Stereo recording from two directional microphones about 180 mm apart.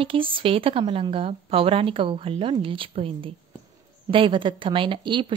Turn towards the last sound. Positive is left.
turn(degrees=-25)  # may be behind; listen again after turning